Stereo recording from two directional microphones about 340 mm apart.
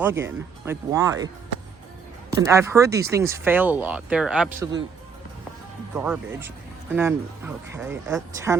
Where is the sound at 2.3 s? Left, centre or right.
Centre.